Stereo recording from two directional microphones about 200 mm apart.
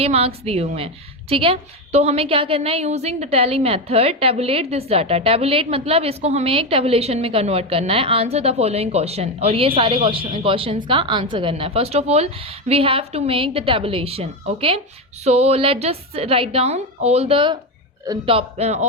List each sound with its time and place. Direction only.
0.0 s a woman's voice: 30° right (ahead or behind)